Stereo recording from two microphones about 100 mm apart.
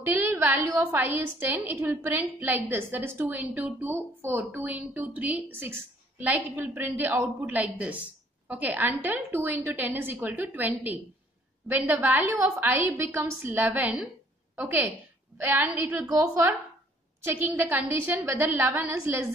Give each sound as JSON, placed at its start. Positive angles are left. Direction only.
{"t": 0.0, "sound": "a woman's voice", "side_deg": -25}
{"t": 16.1, "sound": "a woman's voice", "side_deg": -30}
{"t": 17.2, "sound": "speech", "side_deg": -20}